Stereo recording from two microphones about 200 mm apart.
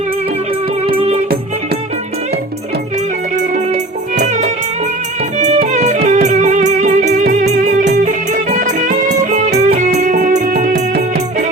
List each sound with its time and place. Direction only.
3.5 s music: 35° right (ahead or behind)
5.6 s music: 35° right (ahead or behind)
9.6 s music: 45° right (ahead or behind)